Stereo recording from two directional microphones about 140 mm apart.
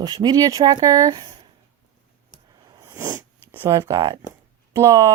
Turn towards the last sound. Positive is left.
turn(degrees=-25)  # may be behind; listen again after turning